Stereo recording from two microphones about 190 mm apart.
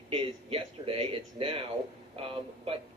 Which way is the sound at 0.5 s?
30° right (ahead or behind).